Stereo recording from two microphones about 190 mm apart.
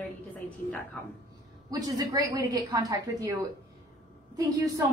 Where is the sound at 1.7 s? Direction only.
20° right (ahead or behind).